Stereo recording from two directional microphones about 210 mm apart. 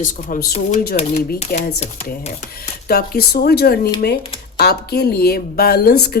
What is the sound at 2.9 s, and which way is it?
Speech, 45° left (ahead or behind).